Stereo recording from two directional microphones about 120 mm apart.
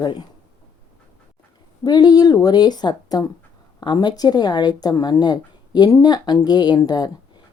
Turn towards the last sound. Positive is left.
turn(degrees=35)  # may be behind; listen again after turning